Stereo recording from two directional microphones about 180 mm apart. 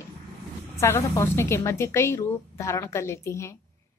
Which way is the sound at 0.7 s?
15° left (ahead or behind).